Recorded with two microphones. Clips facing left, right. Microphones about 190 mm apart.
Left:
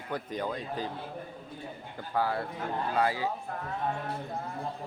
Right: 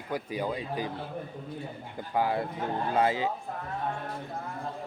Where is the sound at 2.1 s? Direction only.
20° right (ahead or behind).